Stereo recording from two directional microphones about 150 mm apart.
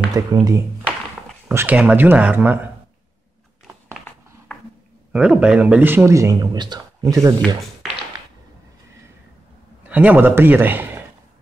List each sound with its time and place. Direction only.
0.1 s speech: 25° right (ahead or behind)
1.5 s speech: 15° right (ahead or behind)
4.5 s a sound: 10° left (ahead or behind)
5.1 s speech: 5° right (ahead or behind); by 7.3 s 20° right (ahead or behind)
9.8 s a man's voice: 10° right (ahead or behind)